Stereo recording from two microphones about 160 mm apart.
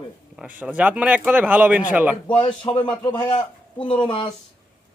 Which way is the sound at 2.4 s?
30° left (ahead or behind).